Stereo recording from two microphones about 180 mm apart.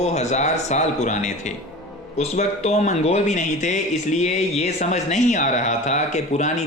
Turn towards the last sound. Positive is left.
turn(degrees=40)  # may be behind; listen again after turning